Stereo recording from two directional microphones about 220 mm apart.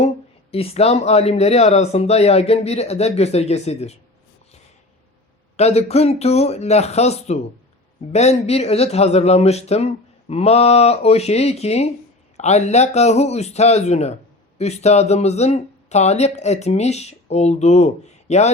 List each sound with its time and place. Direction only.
0.5 s speech: 25° left (ahead or behind)
5.5 s speech: 30° left (ahead or behind)